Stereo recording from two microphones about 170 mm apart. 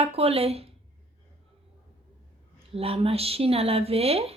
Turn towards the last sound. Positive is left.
turn(degrees=-35)  # may be behind; listen again after turning